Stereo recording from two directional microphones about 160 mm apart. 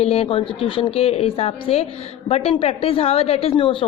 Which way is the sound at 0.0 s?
35° left (ahead or behind).